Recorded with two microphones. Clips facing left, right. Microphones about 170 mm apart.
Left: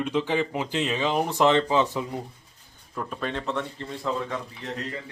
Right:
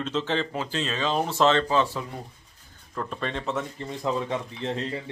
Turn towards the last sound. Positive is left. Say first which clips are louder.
# right 4 dB
turn(degrees=-30)  # may be behind; listen again after turning